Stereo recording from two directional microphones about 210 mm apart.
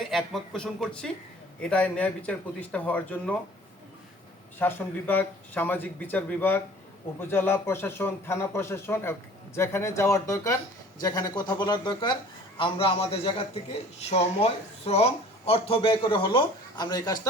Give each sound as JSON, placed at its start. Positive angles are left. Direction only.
{"t": 0.0, "sound": "speech", "side_deg": 0}
{"t": 4.6, "sound": "speech", "side_deg": 10}